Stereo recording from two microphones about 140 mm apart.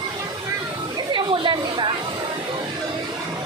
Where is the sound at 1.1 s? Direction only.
35° right (ahead or behind).